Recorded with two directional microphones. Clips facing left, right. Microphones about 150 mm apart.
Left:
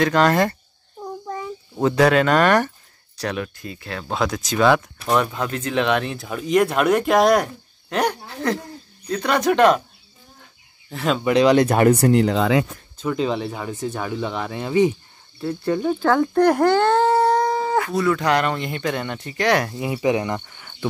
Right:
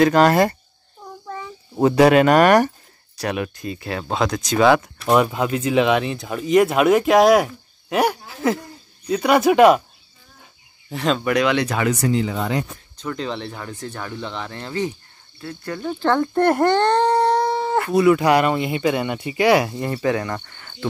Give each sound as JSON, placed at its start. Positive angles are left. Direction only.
{"t": 0.0, "sound": "speech", "side_deg": -10}
{"t": 1.8, "sound": "speech", "side_deg": -10}
{"t": 4.1, "sound": "speech", "side_deg": 0}
{"t": 10.9, "sound": "speech", "side_deg": 5}
{"t": 11.4, "sound": "speech", "side_deg": 45}
{"t": 12.9, "sound": "speech", "side_deg": 10}
{"t": 15.8, "sound": "speech", "side_deg": 5}
{"t": 19.9, "sound": "speech", "side_deg": 15}